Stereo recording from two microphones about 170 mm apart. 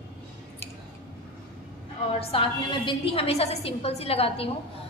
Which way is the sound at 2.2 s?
30° left (ahead or behind).